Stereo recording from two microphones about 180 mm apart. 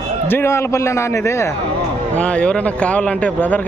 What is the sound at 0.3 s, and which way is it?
Speech, 15° left (ahead or behind).